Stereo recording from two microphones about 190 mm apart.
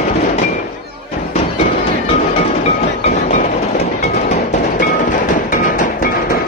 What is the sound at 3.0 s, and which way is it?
Train, 35° left (ahead or behind).